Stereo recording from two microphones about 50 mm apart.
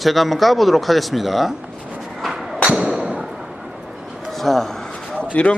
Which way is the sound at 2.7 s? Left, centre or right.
Centre.